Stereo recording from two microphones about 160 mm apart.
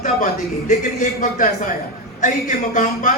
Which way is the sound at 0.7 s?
55° left (ahead or behind).